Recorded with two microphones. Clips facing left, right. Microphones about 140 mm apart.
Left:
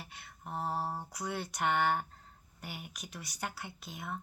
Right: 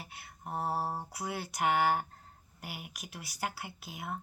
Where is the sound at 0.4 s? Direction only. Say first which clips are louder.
Right 2 dB; 40° right (ahead or behind).